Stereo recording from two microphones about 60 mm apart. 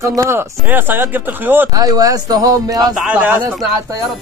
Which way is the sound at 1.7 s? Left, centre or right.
Right.